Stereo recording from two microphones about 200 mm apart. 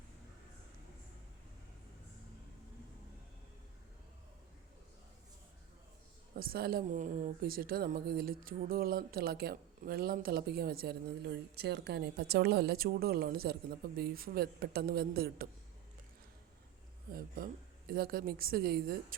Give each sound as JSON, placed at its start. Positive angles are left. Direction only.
{"t": 6.3, "sound": "a woman's voice", "side_deg": -50}
{"t": 17.1, "sound": "a woman's voice", "side_deg": -45}